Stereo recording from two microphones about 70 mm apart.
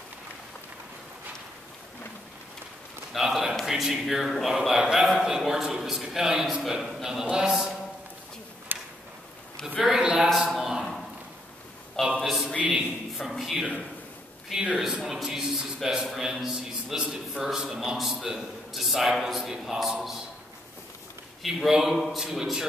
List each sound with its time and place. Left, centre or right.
3.1 s a sound: centre
3.6 s a man's voice: centre
8.7 s a sound: right
9.8 s a man's voice: centre
12.2 s a man's voice: centre
21.4 s speech: centre